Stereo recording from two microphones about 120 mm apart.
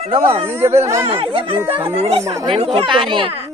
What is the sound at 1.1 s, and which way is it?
Speech, 50° right (ahead or behind).